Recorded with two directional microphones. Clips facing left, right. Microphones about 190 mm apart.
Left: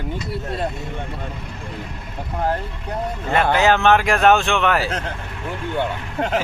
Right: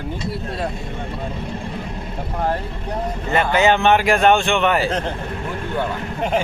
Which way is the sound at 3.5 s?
Centre (ahead or behind).